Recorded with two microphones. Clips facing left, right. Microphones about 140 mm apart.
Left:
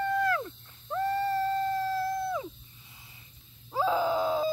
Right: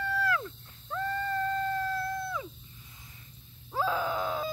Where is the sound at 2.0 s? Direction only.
20° left (ahead or behind).